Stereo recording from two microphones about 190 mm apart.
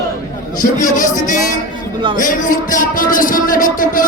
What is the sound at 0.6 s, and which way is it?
Speech, 45° left (ahead or behind).